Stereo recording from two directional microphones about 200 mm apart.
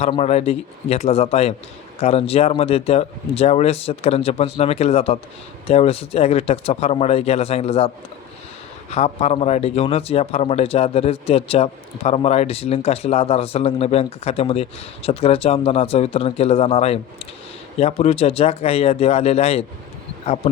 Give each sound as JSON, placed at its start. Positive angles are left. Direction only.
{"t": 0.0, "sound": "speech", "side_deg": 30}
{"t": 8.9, "sound": "speech", "side_deg": 30}